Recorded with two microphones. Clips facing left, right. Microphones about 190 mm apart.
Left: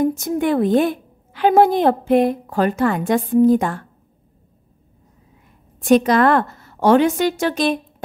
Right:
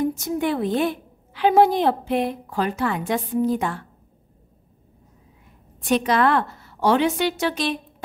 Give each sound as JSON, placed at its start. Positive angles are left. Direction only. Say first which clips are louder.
{"t": 0.0, "sound": "a woman's voice", "louder": "left 4 dB", "side_deg": 50}
{"t": 5.8, "sound": "a woman's voice", "louder": "left 6 dB", "side_deg": 45}